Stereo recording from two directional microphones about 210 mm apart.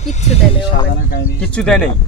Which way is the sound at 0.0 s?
35° left (ahead or behind).